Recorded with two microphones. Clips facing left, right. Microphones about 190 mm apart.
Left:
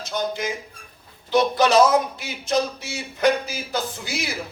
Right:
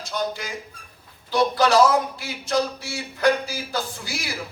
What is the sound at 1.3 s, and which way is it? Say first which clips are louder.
A man's voice: left 1 dB; 20° left (ahead or behind).